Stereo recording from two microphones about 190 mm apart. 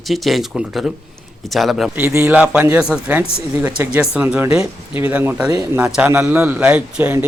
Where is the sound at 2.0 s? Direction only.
10° right (ahead or behind).